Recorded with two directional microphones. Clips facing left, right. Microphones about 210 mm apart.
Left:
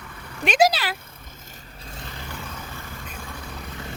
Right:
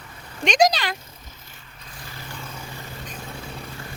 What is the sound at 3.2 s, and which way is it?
Vehicle, 25° right (ahead or behind).